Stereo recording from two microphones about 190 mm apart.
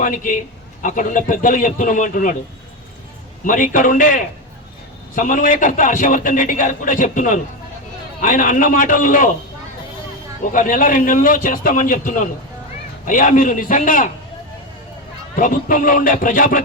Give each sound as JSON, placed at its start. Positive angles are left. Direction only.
{"t": 0.0, "sound": "a man's voice", "side_deg": 45}
{"t": 3.4, "sound": "a man's voice", "side_deg": 45}
{"t": 10.4, "sound": "a man's voice", "side_deg": 45}
{"t": 15.4, "sound": "a man's voice", "side_deg": 45}